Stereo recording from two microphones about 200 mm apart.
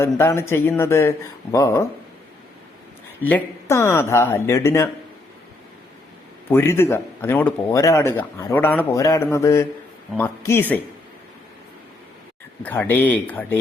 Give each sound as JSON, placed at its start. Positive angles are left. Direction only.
{"t": 0.0, "sound": "speech", "side_deg": 15}
{"t": 3.2, "sound": "speech", "side_deg": 10}
{"t": 6.5, "sound": "speech", "side_deg": 10}
{"t": 12.6, "sound": "speech", "side_deg": 10}